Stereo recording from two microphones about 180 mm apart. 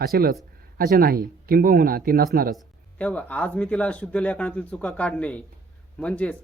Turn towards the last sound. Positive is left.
turn(degrees=5)  # may be behind; listen again after turning